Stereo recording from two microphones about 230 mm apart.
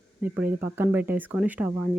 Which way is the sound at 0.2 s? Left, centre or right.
Centre.